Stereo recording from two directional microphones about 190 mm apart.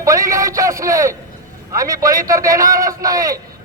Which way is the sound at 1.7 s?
15° right (ahead or behind).